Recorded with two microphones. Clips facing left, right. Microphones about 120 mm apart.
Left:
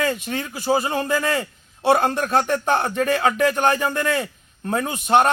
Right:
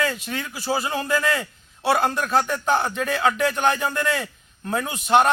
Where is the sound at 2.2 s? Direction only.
45° left (ahead or behind).